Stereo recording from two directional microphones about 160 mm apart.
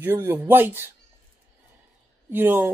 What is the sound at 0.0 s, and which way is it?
Speech, 15° right (ahead or behind).